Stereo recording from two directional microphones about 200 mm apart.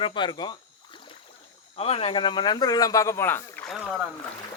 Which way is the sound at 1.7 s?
30° left (ahead or behind).